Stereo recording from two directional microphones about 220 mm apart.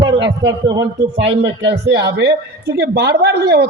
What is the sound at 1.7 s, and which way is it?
Speech, 50° right (ahead or behind).